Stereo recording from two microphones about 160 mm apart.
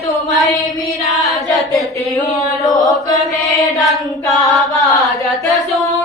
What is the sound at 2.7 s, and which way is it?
Chant, 25° left (ahead or behind).